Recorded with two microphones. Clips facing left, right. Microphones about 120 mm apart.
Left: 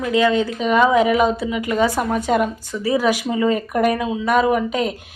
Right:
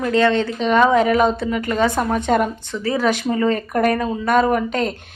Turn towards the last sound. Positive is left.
turn(degrees=5)  # may be behind; listen again after turning